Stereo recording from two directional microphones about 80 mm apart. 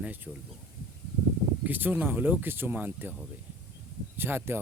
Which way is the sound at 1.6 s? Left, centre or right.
Right.